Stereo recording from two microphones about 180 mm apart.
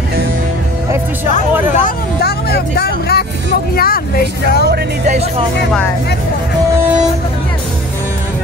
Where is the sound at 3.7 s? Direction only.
55° left (ahead or behind).